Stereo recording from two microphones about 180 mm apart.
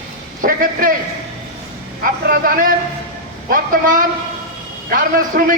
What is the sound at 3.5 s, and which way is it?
A man's voice, 50° right (ahead or behind).